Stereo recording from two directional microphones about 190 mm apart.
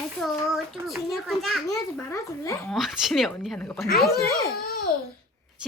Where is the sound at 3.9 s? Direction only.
50° left (ahead or behind).